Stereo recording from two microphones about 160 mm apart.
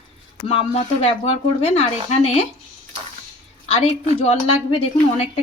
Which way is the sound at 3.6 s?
40° left (ahead or behind).